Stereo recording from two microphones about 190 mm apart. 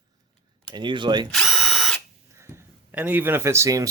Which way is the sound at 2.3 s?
15° right (ahead or behind).